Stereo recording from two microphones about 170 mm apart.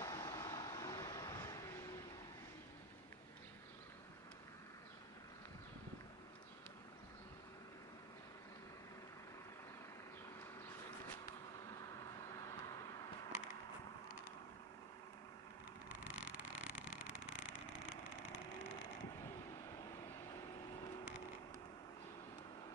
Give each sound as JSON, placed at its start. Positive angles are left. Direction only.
{"t": 0.0, "sound": "vehicle", "side_deg": 20}
{"t": 16.1, "sound": "vehicle", "side_deg": -10}